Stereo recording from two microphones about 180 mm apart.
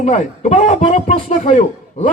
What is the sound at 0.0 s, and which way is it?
Speech, 40° left (ahead or behind).